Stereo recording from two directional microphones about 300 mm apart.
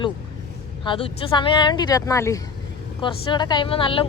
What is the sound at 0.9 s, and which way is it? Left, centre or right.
Speech, centre.